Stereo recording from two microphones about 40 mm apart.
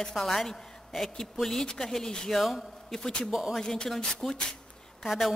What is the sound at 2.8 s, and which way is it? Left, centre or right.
A man's voice, centre.